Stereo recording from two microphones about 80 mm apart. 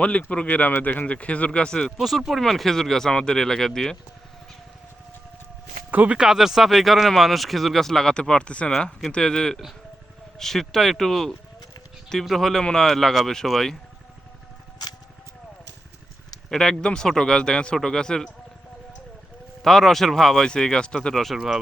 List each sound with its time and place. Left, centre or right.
0.0 s speech: centre
2.0 s speech: centre
5.9 s speech: right
6.1 s speech: centre
16.5 s speech: centre
19.6 s speech: centre